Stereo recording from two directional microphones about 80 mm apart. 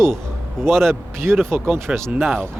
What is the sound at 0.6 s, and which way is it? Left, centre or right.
Speech, right.